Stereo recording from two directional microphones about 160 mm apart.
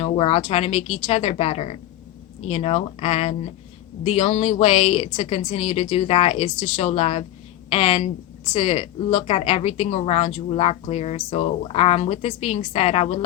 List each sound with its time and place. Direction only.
0.0 s a woman's voice: 35° left (ahead or behind)